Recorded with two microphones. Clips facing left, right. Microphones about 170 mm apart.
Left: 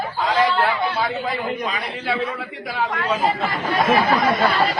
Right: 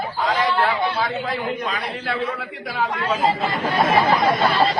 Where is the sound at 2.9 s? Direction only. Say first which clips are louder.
Even; 20° right (ahead or behind).